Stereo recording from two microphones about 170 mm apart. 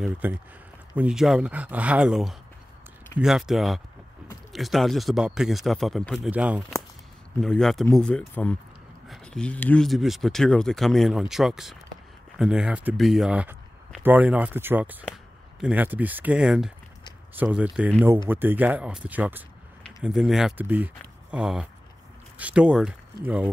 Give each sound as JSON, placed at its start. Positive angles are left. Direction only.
{"t": 0.2, "sound": "speech", "side_deg": -10}